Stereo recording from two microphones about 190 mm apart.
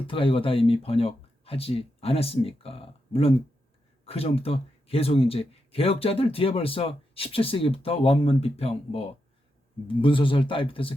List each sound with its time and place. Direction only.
0.1 s speech: 30° left (ahead or behind)